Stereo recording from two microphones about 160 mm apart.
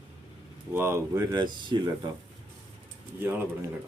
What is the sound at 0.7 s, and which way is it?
Speech, 15° right (ahead or behind).